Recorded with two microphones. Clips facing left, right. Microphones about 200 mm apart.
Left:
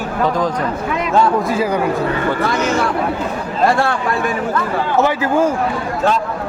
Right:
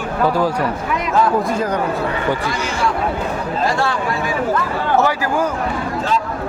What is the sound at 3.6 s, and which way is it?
Speech, 55° left (ahead or behind).